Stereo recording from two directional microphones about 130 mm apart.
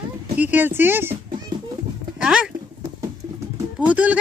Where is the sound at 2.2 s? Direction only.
5° right (ahead or behind).